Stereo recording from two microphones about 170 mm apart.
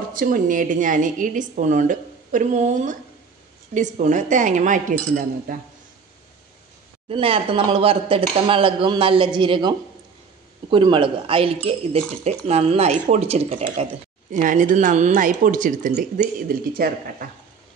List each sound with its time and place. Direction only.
0.1 s a woman's voice: 55° right (ahead or behind)
7.1 s a woman's voice: 35° right (ahead or behind); by 17.3 s 60° right (ahead or behind)